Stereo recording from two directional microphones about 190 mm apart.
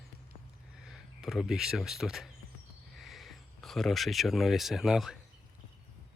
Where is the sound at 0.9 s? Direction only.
Centre (ahead or behind).